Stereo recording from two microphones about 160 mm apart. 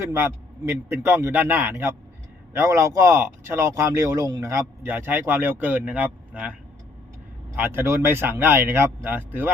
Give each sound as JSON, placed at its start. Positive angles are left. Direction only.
{"t": 0.0, "sound": "speech", "side_deg": -15}